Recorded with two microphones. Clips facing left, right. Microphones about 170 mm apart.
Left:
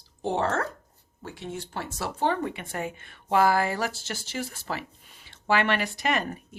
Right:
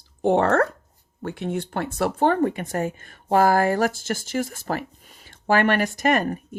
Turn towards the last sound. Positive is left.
turn(degrees=-45)  # may be behind; listen again after turning